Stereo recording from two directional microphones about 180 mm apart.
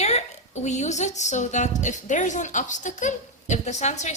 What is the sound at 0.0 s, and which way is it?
A woman's voice, 40° left (ahead or behind).